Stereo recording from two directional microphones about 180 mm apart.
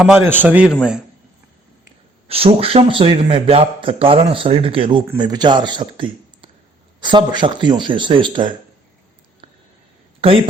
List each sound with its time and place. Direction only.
0.0 s a man's voice: 10° right (ahead or behind)
2.2 s a man's voice: 30° right (ahead or behind)
10.2 s speech: 30° right (ahead or behind)